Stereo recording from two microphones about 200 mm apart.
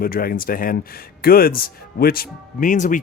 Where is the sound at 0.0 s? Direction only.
45° left (ahead or behind).